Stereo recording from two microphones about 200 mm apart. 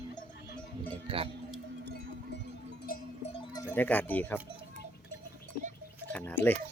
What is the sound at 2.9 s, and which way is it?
Cowbell, 50° left (ahead or behind).